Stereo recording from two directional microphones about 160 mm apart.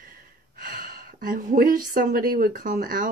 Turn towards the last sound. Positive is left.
turn(degrees=-60)  # may be behind; listen again after turning